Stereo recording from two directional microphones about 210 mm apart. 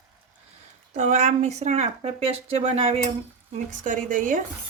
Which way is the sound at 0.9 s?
35° right (ahead or behind).